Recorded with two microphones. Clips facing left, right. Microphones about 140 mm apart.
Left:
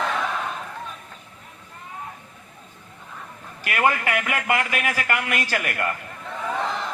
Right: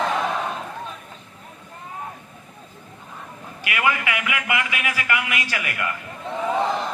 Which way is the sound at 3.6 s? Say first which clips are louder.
Left 2 dB; 45° left (ahead or behind).